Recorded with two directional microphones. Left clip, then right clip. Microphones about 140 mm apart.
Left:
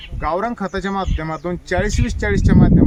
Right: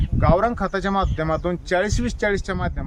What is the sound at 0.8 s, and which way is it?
Speech, 40° right (ahead or behind).